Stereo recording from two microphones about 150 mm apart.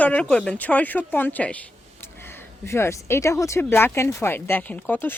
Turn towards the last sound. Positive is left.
turn(degrees=10)  # may be behind; listen again after turning